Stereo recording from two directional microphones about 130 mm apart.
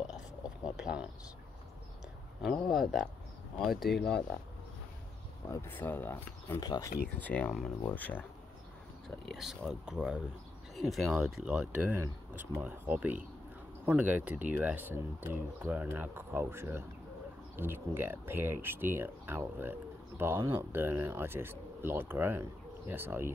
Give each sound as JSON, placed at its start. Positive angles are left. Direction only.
{"t": 0.7, "sound": "speech", "side_deg": -5}
{"t": 2.7, "sound": "speech", "side_deg": 0}
{"t": 5.5, "sound": "speech", "side_deg": 15}
{"t": 6.6, "sound": "speech", "side_deg": 30}
{"t": 7.1, "sound": "speech", "side_deg": 10}
{"t": 9.2, "sound": "speech", "side_deg": 0}